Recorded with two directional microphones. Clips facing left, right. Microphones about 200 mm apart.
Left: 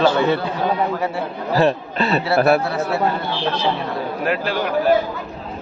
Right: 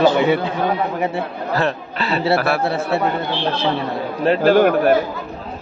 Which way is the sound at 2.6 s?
25° right (ahead or behind).